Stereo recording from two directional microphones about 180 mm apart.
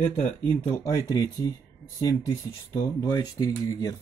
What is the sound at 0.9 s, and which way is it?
Speech, 15° left (ahead or behind).